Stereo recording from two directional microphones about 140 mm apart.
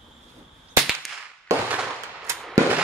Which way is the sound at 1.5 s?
20° right (ahead or behind).